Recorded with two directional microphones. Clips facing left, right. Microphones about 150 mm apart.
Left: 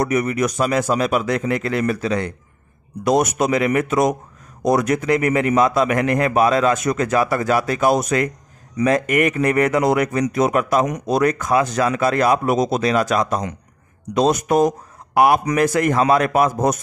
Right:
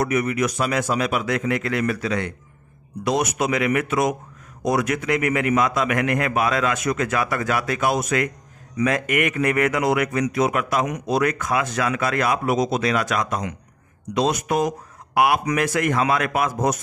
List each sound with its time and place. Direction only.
0.0 s speech: 40° left (ahead or behind)
3.0 s speech: 45° left (ahead or behind)